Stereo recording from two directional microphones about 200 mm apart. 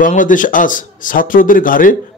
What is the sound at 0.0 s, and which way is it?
A man's voice, 40° left (ahead or behind).